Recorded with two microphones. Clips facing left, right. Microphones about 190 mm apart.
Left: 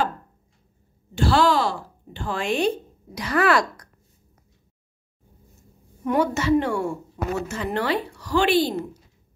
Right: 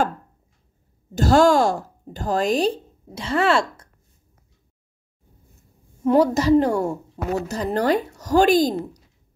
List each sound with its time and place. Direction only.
1.1 s speech: 45° right (ahead or behind); by 3.9 s 25° right (ahead or behind)
6.0 s a woman's voice: 35° right (ahead or behind)